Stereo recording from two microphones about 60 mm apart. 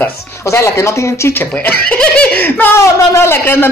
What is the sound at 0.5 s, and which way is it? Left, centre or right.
Speech, left.